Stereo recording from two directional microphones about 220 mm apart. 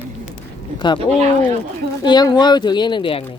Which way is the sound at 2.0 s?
20° left (ahead or behind).